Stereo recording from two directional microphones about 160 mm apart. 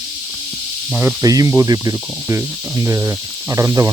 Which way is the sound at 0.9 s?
10° right (ahead or behind).